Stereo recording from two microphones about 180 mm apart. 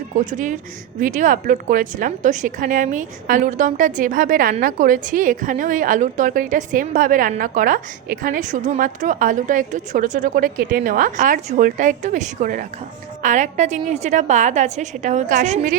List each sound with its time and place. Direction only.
0.3 s a woman's voice: 45° right (ahead or behind)